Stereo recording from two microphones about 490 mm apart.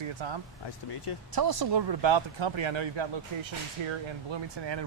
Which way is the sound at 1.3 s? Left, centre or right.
Right.